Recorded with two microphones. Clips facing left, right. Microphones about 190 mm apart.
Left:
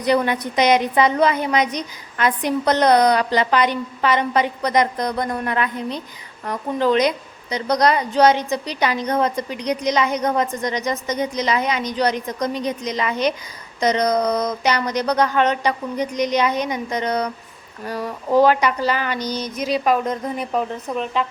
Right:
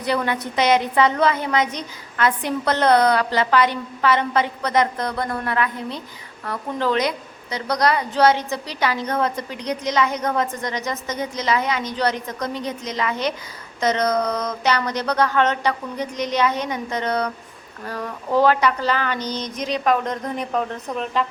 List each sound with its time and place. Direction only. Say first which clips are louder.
0.0 s a woman's voice: left 4 dB; 15° left (ahead or behind); by 21.2 s centre (ahead or behind)